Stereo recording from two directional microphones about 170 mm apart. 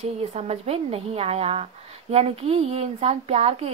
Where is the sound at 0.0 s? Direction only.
40° right (ahead or behind).